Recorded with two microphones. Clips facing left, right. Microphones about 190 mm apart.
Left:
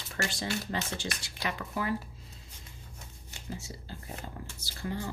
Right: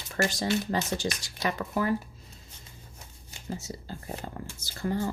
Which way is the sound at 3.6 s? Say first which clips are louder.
Right 5 dB; 40° right (ahead or behind).